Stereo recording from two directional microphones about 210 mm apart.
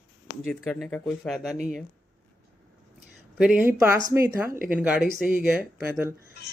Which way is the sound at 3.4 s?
5° right (ahead or behind).